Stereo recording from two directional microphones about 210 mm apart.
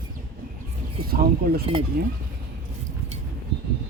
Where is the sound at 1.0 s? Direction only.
45° right (ahead or behind).